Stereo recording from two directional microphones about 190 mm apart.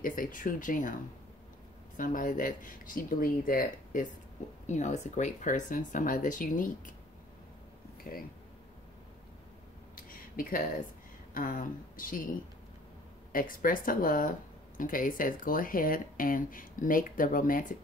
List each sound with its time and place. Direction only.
0.0 s speech: 45° left (ahead or behind)
2.0 s speech: 45° left (ahead or behind)
9.9 s a sound: 50° left (ahead or behind)
11.3 s speech: 45° left (ahead or behind)
13.3 s speech: 45° left (ahead or behind)